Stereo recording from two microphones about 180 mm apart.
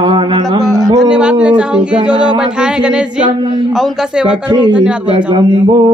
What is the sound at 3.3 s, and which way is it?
Mantra, 25° right (ahead or behind).